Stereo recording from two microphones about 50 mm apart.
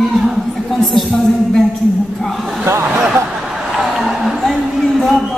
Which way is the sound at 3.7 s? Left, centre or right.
Centre.